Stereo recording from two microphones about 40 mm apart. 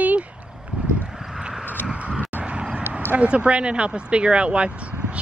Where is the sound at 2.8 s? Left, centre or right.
Right.